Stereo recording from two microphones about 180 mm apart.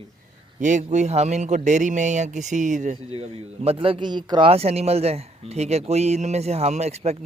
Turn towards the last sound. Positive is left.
turn(degrees=-35)  # may be behind; listen again after turning